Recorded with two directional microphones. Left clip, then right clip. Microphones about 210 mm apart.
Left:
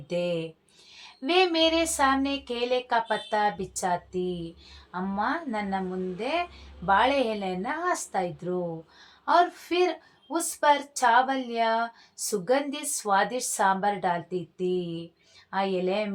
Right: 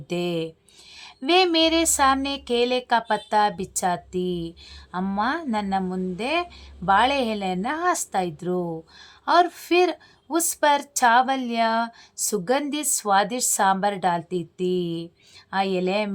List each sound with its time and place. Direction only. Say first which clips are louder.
0.1 s a woman's voice: right 2 dB; 30° right (ahead or behind)